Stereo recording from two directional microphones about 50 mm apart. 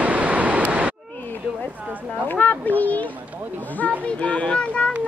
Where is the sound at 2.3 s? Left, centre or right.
Left.